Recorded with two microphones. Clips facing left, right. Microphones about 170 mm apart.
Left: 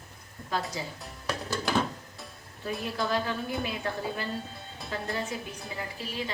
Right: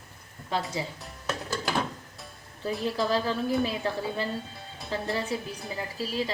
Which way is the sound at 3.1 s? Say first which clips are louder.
Right 3 dB; 30° right (ahead or behind).